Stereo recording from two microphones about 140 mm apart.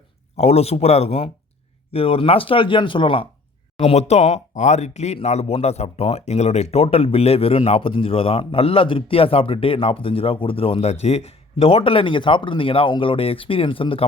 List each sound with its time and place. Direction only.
0.3 s speech: 50° left (ahead or behind)
3.8 s speech: 50° left (ahead or behind)